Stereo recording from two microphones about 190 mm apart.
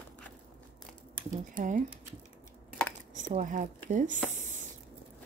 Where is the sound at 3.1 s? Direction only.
40° right (ahead or behind).